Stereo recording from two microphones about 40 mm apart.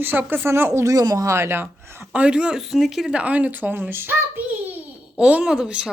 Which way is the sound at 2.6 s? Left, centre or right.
Centre.